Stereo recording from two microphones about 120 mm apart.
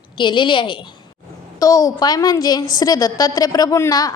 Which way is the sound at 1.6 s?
30° left (ahead or behind).